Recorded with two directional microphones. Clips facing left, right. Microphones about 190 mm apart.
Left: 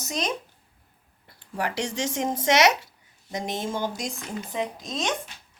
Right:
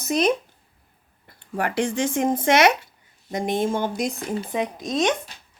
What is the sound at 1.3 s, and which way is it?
Speech, 55° right (ahead or behind).